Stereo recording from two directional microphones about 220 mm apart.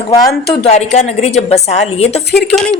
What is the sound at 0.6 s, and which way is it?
A woman's voice, 30° left (ahead or behind).